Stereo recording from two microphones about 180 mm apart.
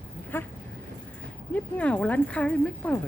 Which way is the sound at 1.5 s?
10° left (ahead or behind).